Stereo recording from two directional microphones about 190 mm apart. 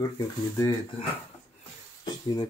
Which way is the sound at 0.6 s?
25° left (ahead or behind).